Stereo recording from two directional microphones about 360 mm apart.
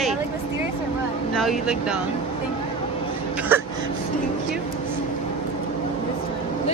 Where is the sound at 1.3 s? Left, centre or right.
Centre.